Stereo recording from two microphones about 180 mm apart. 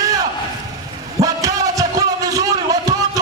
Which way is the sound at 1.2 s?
20° right (ahead or behind).